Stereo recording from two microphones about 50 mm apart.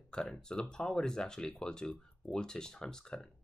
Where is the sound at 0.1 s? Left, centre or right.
Centre.